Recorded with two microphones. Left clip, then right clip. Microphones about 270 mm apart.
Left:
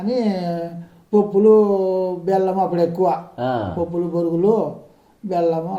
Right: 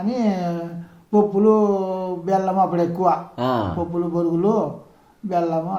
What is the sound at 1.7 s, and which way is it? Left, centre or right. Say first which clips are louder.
Speech: left 4 dB; centre.